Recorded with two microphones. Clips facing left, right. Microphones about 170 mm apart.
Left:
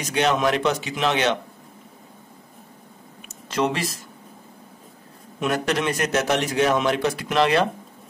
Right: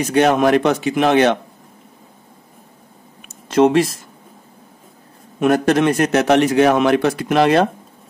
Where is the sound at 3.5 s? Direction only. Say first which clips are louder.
Right 11 dB; 50° right (ahead or behind).